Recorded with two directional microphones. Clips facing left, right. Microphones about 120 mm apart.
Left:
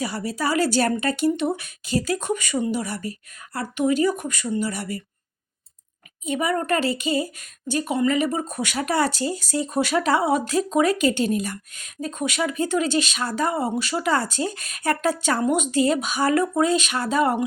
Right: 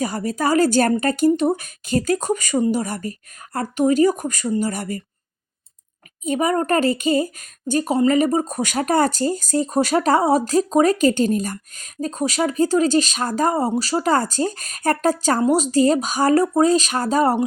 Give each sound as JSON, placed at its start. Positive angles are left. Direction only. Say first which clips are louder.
{"t": 0.0, "sound": "a woman's voice", "louder": "right 4 dB", "side_deg": -45}
{"t": 6.2, "sound": "a woman's voice", "louder": "right 4 dB", "side_deg": -40}